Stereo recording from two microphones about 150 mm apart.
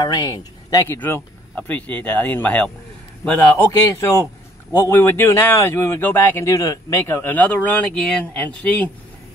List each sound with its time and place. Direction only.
0.0 s speech: 25° left (ahead or behind); by 8.5 s 5° left (ahead or behind)